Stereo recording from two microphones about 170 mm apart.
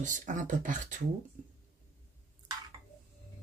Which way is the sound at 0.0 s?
50° right (ahead or behind).